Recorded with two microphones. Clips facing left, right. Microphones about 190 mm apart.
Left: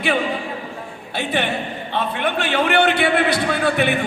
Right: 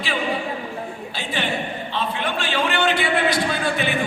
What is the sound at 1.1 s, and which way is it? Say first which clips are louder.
A man's voice: left 4 dB; 60° left (ahead or behind).